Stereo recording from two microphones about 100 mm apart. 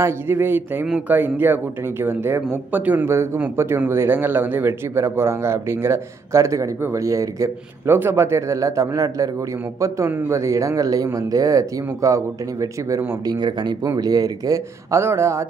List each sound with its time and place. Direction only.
0.0 s speech: 20° right (ahead or behind)